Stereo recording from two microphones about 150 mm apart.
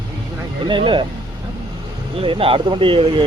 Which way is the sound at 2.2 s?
35° right (ahead or behind).